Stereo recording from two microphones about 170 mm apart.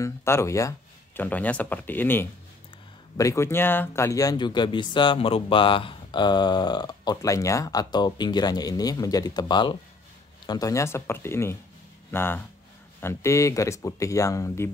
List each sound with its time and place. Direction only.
0.0 s speech: 15° left (ahead or behind)